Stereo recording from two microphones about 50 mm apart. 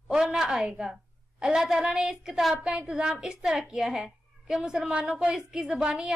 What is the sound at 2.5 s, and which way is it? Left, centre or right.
A woman's voice, right.